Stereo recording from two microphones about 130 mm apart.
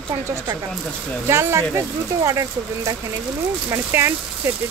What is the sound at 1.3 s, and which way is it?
Speech, 20° right (ahead or behind).